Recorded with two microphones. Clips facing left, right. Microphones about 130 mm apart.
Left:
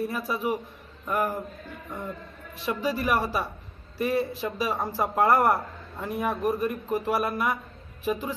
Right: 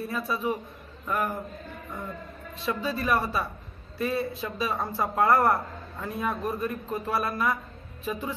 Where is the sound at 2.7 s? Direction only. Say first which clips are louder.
Left 1 dB; 15° left (ahead or behind).